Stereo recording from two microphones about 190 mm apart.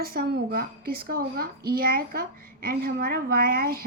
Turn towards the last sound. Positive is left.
turn(degrees=-50)  # may be behind; listen again after turning